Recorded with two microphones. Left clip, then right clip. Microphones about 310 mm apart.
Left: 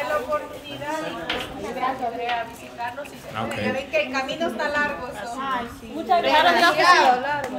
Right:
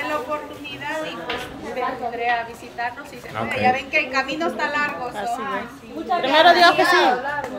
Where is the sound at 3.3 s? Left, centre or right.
Centre.